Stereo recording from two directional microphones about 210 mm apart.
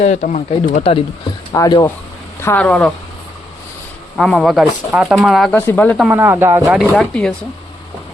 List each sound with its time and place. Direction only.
0.0 s speech: 35° left (ahead or behind)
1.5 s speech: 15° left (ahead or behind)
4.2 s speech: centre (ahead or behind)
6.1 s speech: 10° right (ahead or behind)
6.7 s speech: centre (ahead or behind)